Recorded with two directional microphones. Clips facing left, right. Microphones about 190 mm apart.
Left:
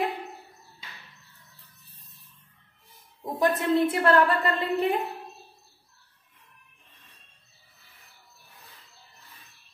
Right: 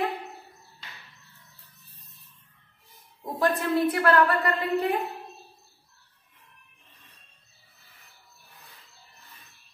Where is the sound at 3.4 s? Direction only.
20° left (ahead or behind).